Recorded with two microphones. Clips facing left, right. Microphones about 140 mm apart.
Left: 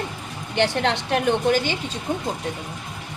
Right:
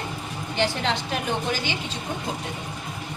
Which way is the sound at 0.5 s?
65° left (ahead or behind).